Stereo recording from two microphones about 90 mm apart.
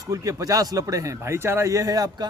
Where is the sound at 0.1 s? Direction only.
40° right (ahead or behind).